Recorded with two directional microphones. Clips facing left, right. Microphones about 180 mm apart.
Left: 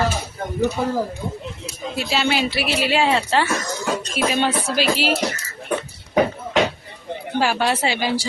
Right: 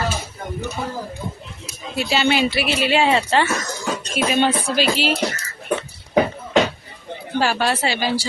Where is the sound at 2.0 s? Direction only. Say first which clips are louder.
Right 3 dB; centre (ahead or behind).